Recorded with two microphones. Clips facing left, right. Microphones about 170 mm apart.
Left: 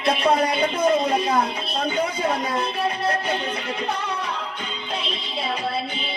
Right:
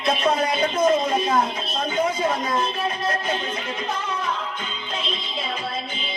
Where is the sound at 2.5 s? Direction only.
65° left (ahead or behind).